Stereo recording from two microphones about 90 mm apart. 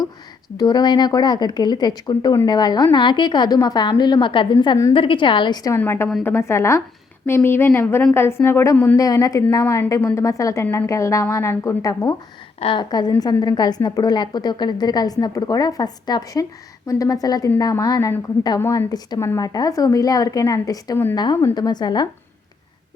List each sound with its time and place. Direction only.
0.5 s a woman's voice: 50° left (ahead or behind)
5.7 s a woman's voice: 30° left (ahead or behind)
9.0 s a woman's voice: 40° left (ahead or behind)